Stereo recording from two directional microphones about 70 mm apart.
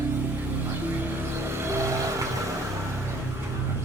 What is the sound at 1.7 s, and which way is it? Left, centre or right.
Vehicle, right.